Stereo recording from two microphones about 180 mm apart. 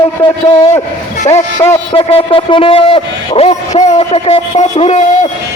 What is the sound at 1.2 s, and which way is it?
A man's voice, 40° left (ahead or behind).